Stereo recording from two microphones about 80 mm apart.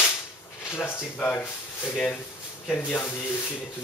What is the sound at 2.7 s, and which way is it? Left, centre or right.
Speech, centre.